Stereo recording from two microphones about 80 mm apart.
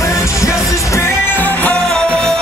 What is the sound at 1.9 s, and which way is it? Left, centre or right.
Music, centre.